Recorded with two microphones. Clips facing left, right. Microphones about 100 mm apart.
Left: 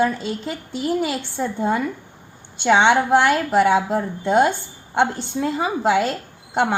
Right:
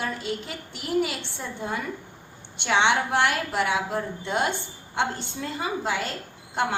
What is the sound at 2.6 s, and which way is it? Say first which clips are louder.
A woman's voice: left 7 dB; 50° left (ahead or behind).